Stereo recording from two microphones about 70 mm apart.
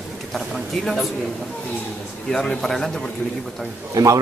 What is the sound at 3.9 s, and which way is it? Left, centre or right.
Speech, right.